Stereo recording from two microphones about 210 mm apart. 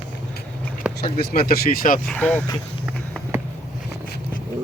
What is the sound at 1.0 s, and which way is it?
Speech, 45° left (ahead or behind).